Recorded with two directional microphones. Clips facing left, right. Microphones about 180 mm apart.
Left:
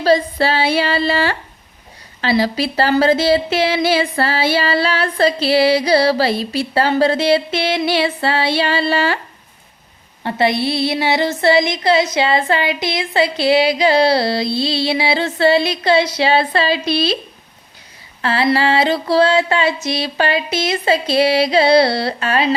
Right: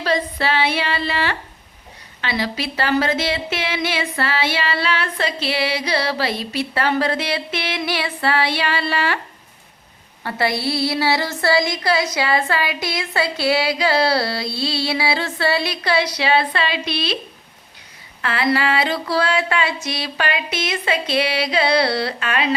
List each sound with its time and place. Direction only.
0.0 s speech: 35° left (ahead or behind)
10.2 s a sound: 20° left (ahead or behind)
18.2 s speech: 30° left (ahead or behind)